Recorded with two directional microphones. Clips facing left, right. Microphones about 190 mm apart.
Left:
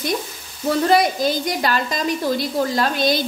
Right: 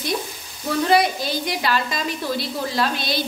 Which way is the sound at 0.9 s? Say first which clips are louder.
Even; 45° left (ahead or behind).